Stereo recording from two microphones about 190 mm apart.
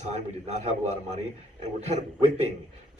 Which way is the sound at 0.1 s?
35° right (ahead or behind).